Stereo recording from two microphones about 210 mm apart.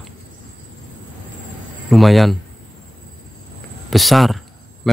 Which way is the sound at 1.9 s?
Centre (ahead or behind).